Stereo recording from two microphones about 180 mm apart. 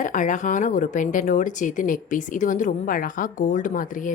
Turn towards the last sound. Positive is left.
turn(degrees=50)  # may be behind; listen again after turning